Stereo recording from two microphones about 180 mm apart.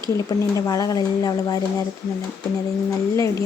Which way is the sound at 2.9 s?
15° left (ahead or behind).